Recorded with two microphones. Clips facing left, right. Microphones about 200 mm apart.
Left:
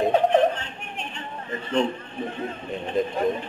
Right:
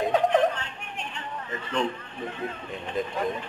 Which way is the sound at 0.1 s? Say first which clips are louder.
Left 3 dB; 25° left (ahead or behind).